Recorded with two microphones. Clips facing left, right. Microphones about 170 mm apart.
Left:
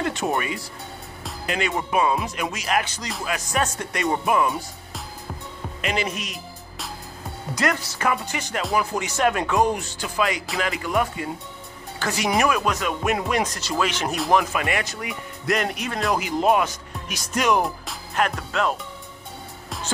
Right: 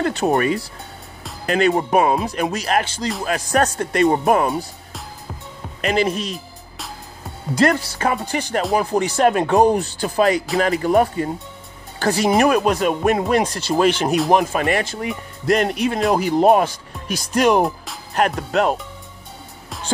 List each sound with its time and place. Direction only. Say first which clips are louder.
0.0 s speech: right 6 dB; 35° right (ahead or behind)
5.8 s speech: right 7 dB; 40° right (ahead or behind)
7.5 s speech: right 8 dB; 30° right (ahead or behind)
18.1 s speech: right 6 dB; 45° right (ahead or behind)